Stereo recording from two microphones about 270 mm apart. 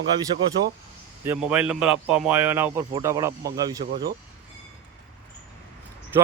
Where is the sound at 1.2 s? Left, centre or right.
Centre.